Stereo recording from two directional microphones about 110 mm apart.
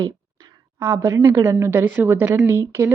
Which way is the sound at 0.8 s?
20° right (ahead or behind).